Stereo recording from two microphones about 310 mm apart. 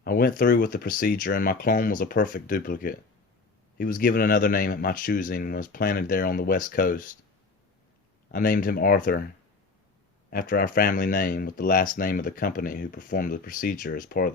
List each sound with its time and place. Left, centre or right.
0.0 s speech: left
8.3 s speech: left
10.2 s speech: left